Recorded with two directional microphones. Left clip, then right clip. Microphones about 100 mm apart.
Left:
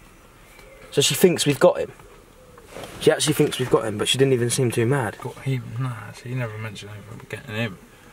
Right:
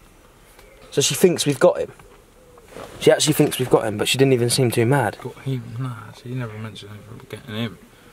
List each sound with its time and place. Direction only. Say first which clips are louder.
0.9 s speech: even; 10° right (ahead or behind)
3.0 s speech: right 3 dB; 25° right (ahead or behind)
3.7 s speech: right 3 dB; 40° right (ahead or behind)
5.2 s speech: even; 10° right (ahead or behind)